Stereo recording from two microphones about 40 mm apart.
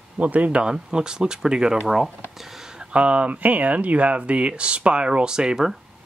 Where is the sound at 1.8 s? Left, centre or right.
Centre.